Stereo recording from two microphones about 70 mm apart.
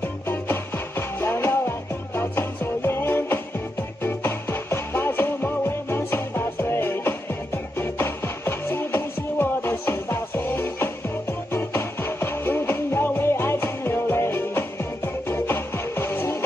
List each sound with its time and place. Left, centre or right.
0.0 s music: left